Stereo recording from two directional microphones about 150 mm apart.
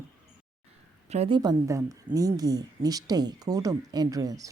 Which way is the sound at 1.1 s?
45° right (ahead or behind).